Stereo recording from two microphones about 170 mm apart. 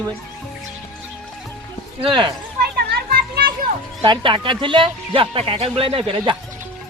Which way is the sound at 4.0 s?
30° right (ahead or behind).